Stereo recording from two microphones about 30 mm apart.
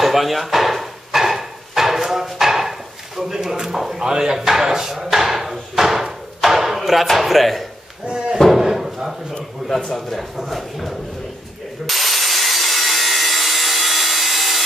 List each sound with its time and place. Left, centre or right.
0.0 s hammer: centre
4.0 s speech: right
4.4 s hammer: centre
6.4 s speech: centre
8.1 s speech: right
8.5 s slam: centre
9.6 s speech: centre
10.3 s speech: centre
11.8 s wood: centre